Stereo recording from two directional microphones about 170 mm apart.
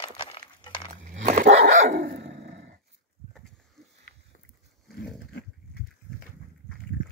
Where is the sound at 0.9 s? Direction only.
40° right (ahead or behind).